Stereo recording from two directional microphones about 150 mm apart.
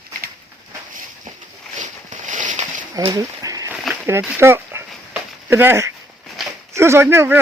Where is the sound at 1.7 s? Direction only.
55° right (ahead or behind).